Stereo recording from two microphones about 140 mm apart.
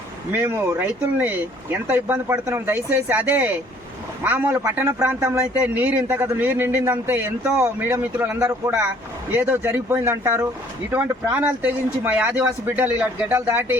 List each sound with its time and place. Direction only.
0.3 s a man's voice: 15° right (ahead or behind)